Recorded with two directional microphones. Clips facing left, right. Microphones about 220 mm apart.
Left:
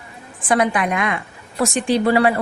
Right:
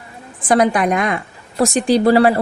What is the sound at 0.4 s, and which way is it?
A woman's voice, 40° right (ahead or behind).